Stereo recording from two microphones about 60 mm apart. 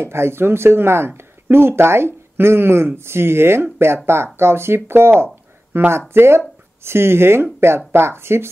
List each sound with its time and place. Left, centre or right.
0.0 s speech: right